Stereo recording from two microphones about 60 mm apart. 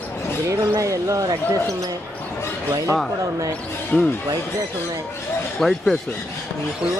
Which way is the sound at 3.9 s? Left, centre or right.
Left.